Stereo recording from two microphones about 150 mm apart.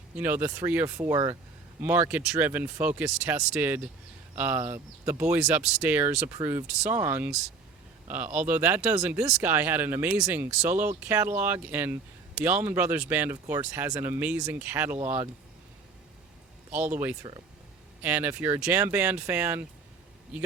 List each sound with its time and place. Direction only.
0.2 s speech: 10° right (ahead or behind)
1.0 s speech: 20° right (ahead or behind)
1.8 s speech: 10° right (ahead or behind)
16.7 s speech: 10° right (ahead or behind)